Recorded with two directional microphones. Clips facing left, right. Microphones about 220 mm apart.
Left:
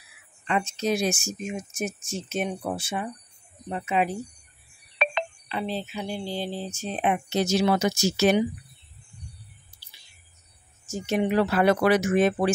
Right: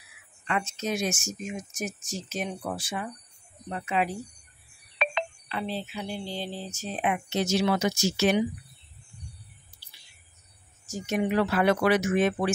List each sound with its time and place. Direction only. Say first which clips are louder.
0.5 s speech: left 4 dB; 30° left (ahead or behind)
5.5 s speech: left 4 dB; 15° left (ahead or behind)
6.7 s speech: left 2 dB; 30° left (ahead or behind)
10.9 s speech: left 2 dB; 30° left (ahead or behind)